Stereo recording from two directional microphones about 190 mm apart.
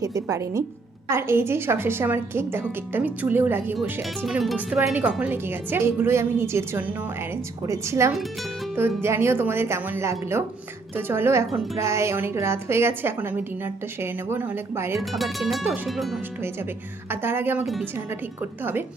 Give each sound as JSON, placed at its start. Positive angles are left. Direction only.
{"t": 0.0, "sound": "a woman's voice", "side_deg": -15}
{"t": 15.1, "sound": "a woman's voice", "side_deg": 0}
{"t": 17.1, "sound": "a woman's voice", "side_deg": -10}